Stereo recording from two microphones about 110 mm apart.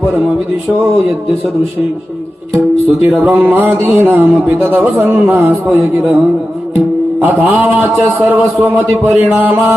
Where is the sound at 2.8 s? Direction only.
15° right (ahead or behind).